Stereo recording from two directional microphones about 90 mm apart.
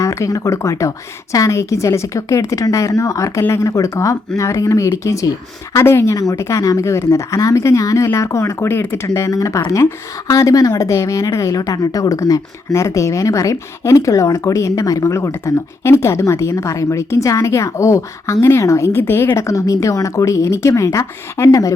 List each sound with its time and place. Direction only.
0.0 s a woman's voice: 35° left (ahead or behind)